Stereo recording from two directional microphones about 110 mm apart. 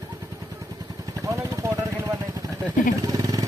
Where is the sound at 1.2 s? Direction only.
30° right (ahead or behind).